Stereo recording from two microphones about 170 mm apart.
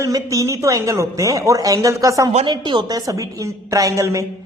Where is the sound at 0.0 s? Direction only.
20° right (ahead or behind).